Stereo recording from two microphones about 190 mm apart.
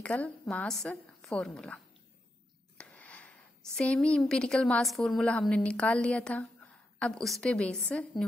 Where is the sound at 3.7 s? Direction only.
5° left (ahead or behind).